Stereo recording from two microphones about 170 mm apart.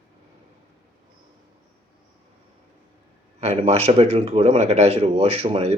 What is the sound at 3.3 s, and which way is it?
Speech, 40° right (ahead or behind).